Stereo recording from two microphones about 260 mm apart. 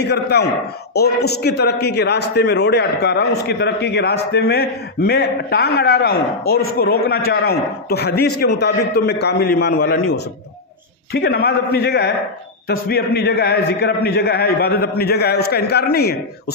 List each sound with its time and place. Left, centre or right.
0.0 s a man's voice: left